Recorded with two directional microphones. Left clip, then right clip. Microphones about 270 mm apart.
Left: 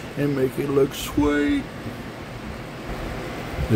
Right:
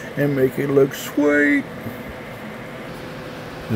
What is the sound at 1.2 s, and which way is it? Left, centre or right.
Speech, centre.